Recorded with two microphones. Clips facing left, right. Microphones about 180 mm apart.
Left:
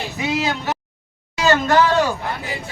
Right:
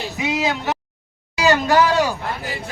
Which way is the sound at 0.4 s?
Centre (ahead or behind).